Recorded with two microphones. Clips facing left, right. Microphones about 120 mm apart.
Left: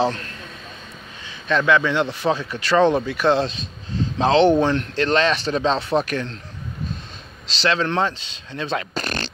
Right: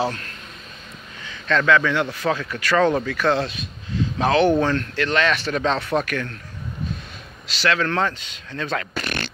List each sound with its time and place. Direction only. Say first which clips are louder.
1.2 s a man's voice: even; 20° left (ahead or behind)
7.4 s a man's voice: left 1 dB; 25° left (ahead or behind)
9.0 s beatboxing: left 1 dB; 35° left (ahead or behind)